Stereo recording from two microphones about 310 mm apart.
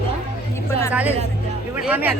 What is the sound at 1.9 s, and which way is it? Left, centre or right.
Speech, centre.